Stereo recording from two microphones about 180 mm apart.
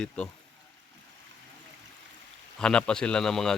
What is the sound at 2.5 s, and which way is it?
Speech, 5° left (ahead or behind).